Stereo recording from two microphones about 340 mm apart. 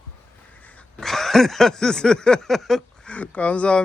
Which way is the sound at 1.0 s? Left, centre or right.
Centre.